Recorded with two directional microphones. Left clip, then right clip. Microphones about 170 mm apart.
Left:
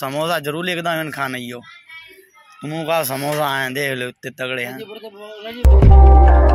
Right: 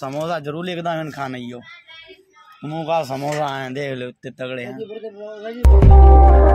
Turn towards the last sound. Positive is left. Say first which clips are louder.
# right 1 dB
turn(degrees=0)  # may be behind; listen again after turning